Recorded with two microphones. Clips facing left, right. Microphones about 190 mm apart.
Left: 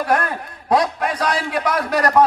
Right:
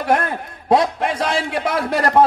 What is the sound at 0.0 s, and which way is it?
A man's voice, 25° right (ahead or behind).